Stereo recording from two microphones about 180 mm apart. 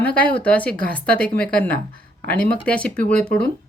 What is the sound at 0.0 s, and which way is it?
Speech, 5° left (ahead or behind).